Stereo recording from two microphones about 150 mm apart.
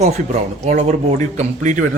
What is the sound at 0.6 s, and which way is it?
Speech, 50° right (ahead or behind).